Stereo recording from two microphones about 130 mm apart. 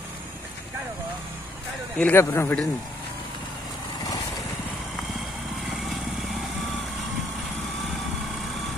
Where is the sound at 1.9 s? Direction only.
15° left (ahead or behind).